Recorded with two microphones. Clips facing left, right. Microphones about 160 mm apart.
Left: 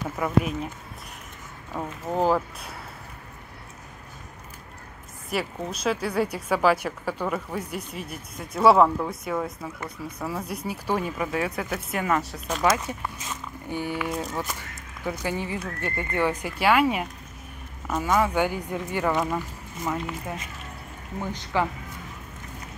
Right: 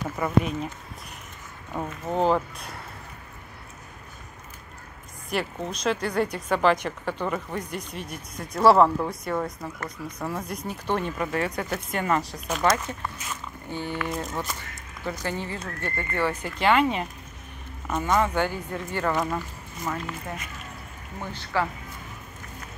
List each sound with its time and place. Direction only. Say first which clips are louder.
0.2 s speech: even; 5° left (ahead or behind)
1.7 s speech: even; centre (ahead or behind)
5.3 s speech: even; 5° left (ahead or behind)
12.7 s speech: left 1 dB; 10° left (ahead or behind)